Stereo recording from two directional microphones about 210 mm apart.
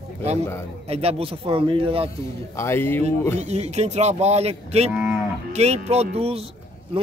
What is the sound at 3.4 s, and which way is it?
Speech, 30° right (ahead or behind).